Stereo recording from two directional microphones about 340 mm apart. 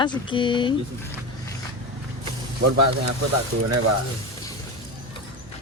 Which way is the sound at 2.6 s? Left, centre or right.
Right.